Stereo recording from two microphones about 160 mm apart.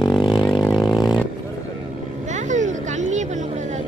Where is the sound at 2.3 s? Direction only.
50° right (ahead or behind).